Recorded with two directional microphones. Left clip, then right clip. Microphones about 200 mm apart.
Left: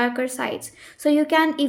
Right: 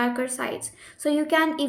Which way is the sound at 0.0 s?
30° left (ahead or behind).